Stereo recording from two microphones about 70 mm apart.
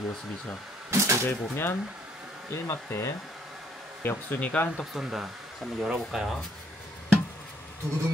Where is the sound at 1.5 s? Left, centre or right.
Left.